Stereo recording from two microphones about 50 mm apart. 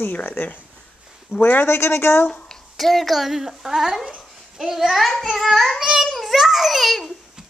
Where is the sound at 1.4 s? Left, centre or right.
Left.